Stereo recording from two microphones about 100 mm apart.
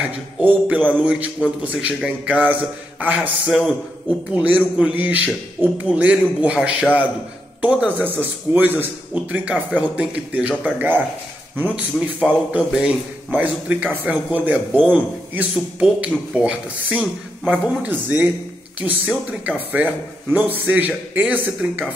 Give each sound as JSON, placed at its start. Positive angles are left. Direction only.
{"t": 0.1, "sound": "a man's voice", "side_deg": -15}
{"t": 3.4, "sound": "a man's voice", "side_deg": 0}
{"t": 4.3, "sound": "a man's voice", "side_deg": -10}